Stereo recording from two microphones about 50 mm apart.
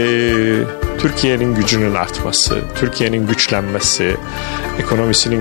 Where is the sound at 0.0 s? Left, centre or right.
Left.